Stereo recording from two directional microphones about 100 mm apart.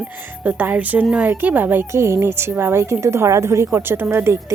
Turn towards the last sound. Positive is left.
turn(degrees=-25)  # may be behind; listen again after turning